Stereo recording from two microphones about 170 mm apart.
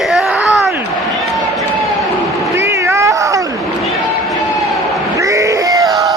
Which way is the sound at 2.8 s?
15° right (ahead or behind).